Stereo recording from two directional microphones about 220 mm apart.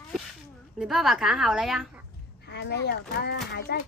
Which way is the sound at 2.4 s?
50° left (ahead or behind).